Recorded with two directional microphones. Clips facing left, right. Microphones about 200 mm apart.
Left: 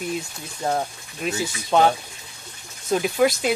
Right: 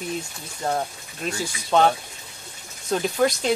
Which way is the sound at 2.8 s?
10° left (ahead or behind).